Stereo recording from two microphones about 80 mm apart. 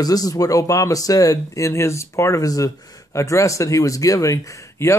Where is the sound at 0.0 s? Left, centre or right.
Left.